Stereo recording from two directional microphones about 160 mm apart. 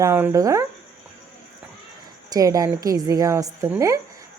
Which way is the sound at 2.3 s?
20° right (ahead or behind).